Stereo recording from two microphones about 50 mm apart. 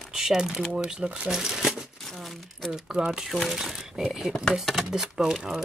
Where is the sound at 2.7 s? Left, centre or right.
Centre.